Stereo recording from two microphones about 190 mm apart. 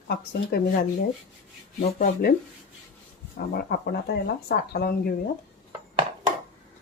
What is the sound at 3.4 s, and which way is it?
Speech, 55° left (ahead or behind).